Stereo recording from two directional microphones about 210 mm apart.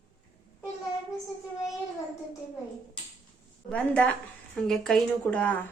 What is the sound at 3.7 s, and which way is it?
A woman's voice, 5° left (ahead or behind).